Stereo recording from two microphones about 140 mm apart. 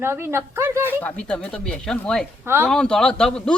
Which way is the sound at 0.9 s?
10° left (ahead or behind).